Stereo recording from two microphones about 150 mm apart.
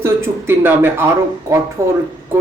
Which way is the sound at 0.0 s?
15° right (ahead or behind).